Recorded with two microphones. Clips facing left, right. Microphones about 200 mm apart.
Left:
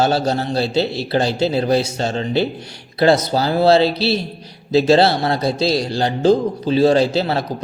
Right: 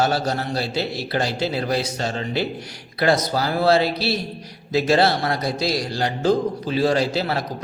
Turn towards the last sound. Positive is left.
turn(degrees=25)  # may be behind; listen again after turning